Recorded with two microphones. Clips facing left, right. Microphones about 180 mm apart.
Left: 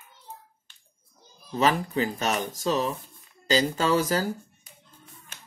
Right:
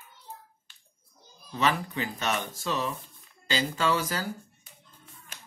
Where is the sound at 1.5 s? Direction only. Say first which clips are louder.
Left 4 dB; 40° left (ahead or behind).